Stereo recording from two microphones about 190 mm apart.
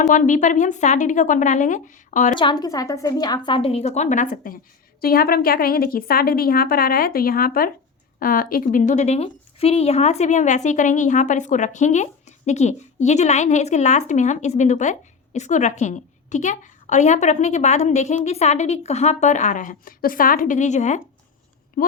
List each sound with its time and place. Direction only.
0.0 s a woman's voice: 40° left (ahead or behind)
2.3 s a woman's voice: 25° left (ahead or behind); by 21.9 s 45° left (ahead or behind)